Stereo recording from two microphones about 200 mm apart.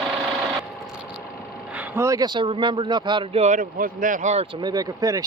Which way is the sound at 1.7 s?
10° right (ahead or behind).